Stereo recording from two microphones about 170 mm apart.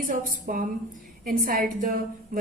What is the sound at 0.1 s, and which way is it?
A woman's voice, 50° right (ahead or behind).